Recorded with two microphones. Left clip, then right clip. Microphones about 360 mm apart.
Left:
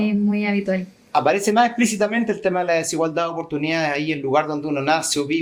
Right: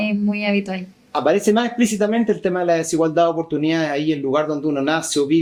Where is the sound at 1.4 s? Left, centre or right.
Centre.